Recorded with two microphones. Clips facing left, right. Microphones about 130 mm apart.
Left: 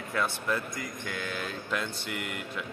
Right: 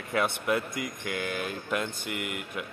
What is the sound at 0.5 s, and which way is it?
Speech, 60° right (ahead or behind).